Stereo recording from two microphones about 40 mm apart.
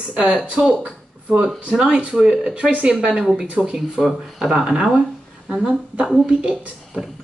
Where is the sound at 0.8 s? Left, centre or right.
Right.